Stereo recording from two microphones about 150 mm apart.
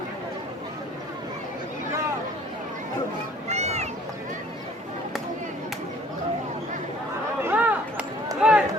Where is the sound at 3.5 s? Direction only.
45° right (ahead or behind).